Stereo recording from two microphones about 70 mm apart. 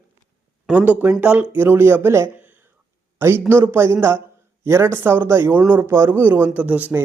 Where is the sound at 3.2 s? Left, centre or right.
Right.